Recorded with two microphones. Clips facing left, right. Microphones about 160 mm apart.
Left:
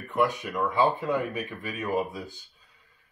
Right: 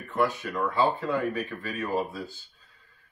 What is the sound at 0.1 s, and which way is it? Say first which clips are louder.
Speech: left 1 dB; 15° left (ahead or behind).